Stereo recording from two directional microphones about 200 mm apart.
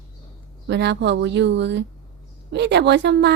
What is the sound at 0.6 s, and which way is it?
Speech, 60° right (ahead or behind).